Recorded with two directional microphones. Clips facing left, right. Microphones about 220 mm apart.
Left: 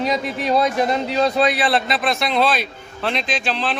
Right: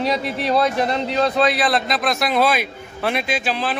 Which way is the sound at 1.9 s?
Centre (ahead or behind).